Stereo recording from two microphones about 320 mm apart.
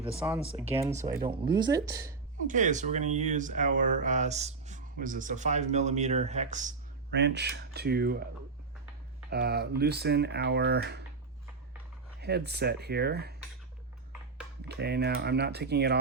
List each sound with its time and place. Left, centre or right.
0.3 s speech: centre
2.5 s speech: right
9.3 s speech: right
12.2 s speech: right
14.7 s speech: right